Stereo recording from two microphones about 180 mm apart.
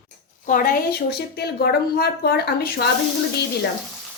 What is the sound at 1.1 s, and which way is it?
Speech, 65° left (ahead or behind).